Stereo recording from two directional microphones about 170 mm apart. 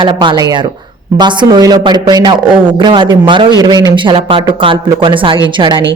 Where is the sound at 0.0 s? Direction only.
25° right (ahead or behind).